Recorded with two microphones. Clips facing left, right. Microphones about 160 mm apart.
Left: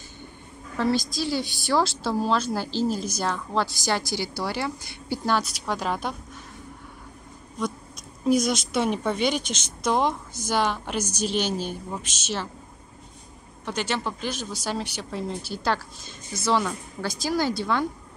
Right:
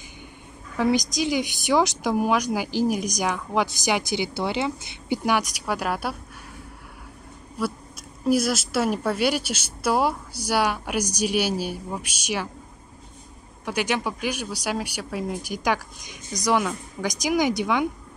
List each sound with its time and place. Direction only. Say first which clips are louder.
0.7 s a woman's voice: right 2 dB; 20° right (ahead or behind)
7.6 s a woman's voice: right 2 dB; 10° right (ahead or behind)
13.7 s a woman's voice: right 3 dB; 10° right (ahead or behind)